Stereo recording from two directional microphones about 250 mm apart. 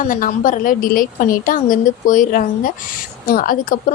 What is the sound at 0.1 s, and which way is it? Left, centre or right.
A woman's voice, left.